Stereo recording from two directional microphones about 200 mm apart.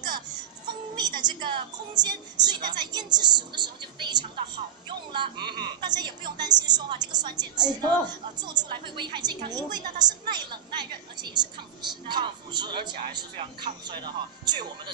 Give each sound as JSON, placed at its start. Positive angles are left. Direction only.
{"t": 0.9, "sound": "a woman's voice", "side_deg": -20}